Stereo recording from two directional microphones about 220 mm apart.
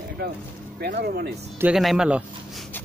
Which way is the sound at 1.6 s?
5° right (ahead or behind).